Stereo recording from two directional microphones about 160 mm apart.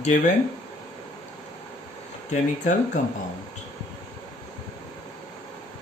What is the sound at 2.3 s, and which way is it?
Speech, 50° left (ahead or behind).